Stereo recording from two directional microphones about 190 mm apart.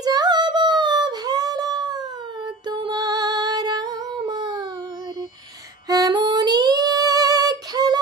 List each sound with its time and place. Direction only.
0.0 s a sound: 20° right (ahead or behind)
2.7 s music: 20° right (ahead or behind)
5.9 s female singing: 20° right (ahead or behind)